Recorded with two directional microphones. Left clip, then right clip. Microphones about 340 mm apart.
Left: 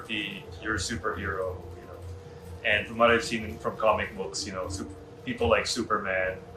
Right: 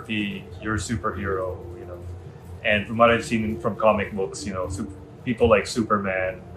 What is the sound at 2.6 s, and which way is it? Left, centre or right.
Speech, centre.